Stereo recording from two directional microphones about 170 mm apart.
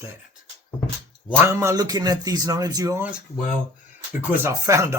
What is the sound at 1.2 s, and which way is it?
Speech, 15° right (ahead or behind).